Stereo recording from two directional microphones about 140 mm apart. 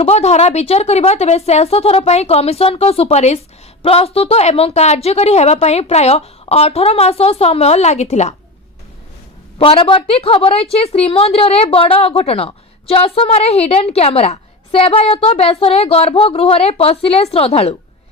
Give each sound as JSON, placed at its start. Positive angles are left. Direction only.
{"t": 0.0, "sound": "a woman's voice", "side_deg": 50}
{"t": 9.6, "sound": "a woman's voice", "side_deg": 40}